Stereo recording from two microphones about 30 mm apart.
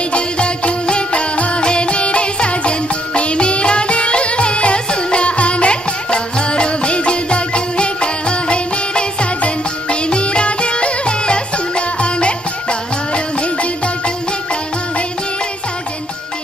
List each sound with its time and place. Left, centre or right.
0.1 s music: left